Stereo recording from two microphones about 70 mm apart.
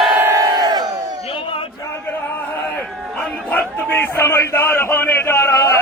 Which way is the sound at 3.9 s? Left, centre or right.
Left.